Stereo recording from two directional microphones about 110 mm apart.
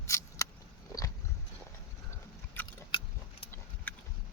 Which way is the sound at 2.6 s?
15° left (ahead or behind).